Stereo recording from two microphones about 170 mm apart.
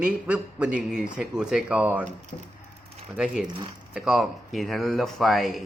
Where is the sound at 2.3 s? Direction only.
45° left (ahead or behind).